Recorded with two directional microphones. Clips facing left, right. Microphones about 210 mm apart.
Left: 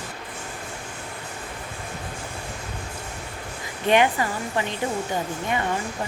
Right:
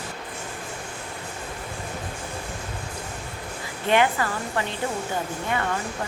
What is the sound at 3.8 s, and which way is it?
Speech, 20° left (ahead or behind).